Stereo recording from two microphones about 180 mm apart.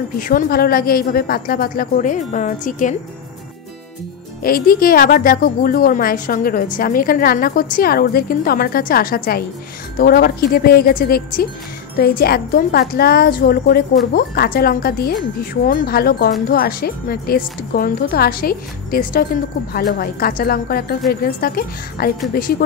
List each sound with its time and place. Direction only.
0.2 s a woman's voice: 50° left (ahead or behind)
4.4 s a woman's voice: 55° left (ahead or behind)